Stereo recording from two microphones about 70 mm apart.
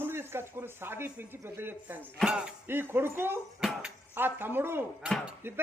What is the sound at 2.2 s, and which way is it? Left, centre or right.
Music, centre.